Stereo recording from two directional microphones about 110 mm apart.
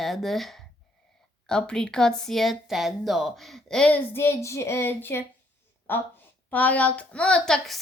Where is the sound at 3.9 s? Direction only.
20° left (ahead or behind).